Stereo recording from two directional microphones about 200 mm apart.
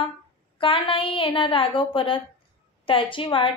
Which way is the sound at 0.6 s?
25° left (ahead or behind).